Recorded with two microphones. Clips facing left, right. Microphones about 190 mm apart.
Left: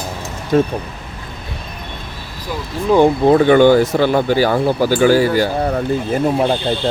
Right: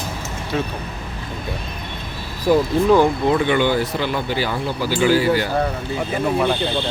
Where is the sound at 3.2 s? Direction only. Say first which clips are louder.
Left 8 dB; 40° left (ahead or behind).